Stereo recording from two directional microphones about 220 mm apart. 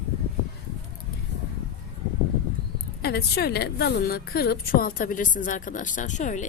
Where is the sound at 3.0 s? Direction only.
45° left (ahead or behind).